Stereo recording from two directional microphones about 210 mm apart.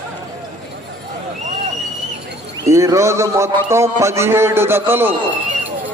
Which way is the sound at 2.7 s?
15° right (ahead or behind).